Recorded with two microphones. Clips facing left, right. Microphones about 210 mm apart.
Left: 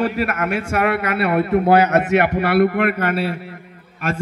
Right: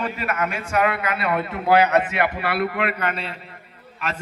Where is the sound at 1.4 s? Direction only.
55° left (ahead or behind).